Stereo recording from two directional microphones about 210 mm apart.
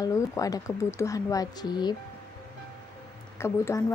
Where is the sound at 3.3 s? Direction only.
10° left (ahead or behind).